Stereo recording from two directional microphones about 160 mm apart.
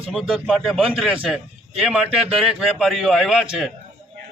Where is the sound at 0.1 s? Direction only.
Centre (ahead or behind).